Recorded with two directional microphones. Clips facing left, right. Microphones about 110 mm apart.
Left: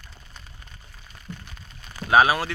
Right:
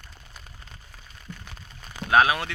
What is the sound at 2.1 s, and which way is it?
Speech, 5° left (ahead or behind).